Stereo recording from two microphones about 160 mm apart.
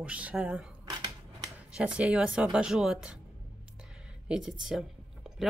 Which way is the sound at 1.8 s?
5° right (ahead or behind).